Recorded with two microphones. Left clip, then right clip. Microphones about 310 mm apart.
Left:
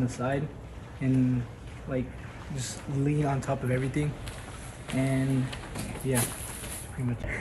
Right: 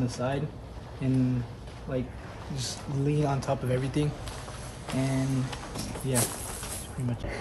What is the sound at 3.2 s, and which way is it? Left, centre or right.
Speech, centre.